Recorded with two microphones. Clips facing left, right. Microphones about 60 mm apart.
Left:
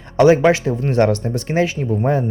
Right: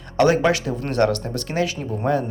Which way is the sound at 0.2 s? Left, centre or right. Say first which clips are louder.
Left 5 dB; left.